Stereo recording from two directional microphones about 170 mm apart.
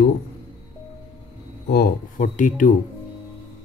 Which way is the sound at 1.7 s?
60° left (ahead or behind).